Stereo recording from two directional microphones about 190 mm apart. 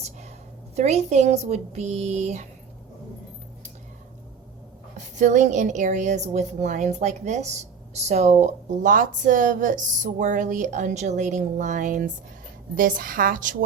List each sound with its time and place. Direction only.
0.8 s speech: 35° right (ahead or behind)
4.9 s a woman's voice: 40° right (ahead or behind)